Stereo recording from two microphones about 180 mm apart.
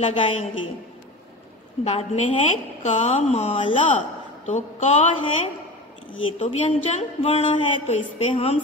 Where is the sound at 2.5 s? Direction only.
35° left (ahead or behind).